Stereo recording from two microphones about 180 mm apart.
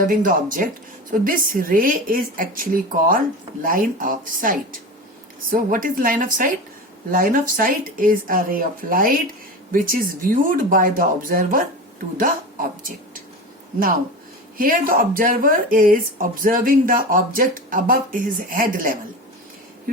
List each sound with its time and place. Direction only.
0.0 s speech: 50° right (ahead or behind)
14.6 s speech: 55° right (ahead or behind)